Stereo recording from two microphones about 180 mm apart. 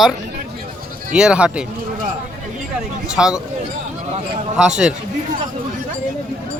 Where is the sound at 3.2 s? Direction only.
5° right (ahead or behind).